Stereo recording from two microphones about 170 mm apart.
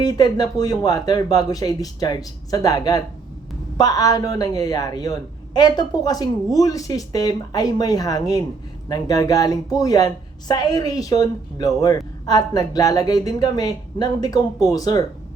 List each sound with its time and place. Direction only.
0.0 s a woman's voice: 25° left (ahead or behind)